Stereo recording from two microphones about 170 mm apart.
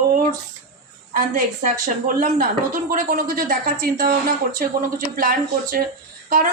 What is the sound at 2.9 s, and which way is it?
A woman's voice, 50° right (ahead or behind).